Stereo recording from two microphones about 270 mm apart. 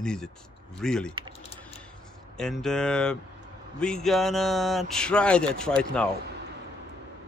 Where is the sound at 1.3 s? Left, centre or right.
Left.